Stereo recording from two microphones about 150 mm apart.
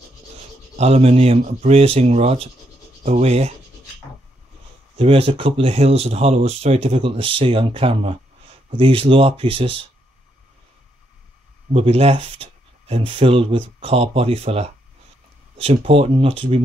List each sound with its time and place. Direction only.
0.7 s speech: 45° right (ahead or behind)
3.0 s rub: 45° right (ahead or behind)
4.9 s speech: 40° right (ahead or behind)
11.7 s speech: 40° right (ahead or behind)